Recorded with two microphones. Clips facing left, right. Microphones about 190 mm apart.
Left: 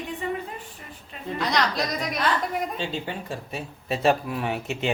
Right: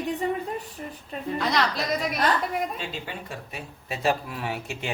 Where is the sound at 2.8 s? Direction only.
30° left (ahead or behind).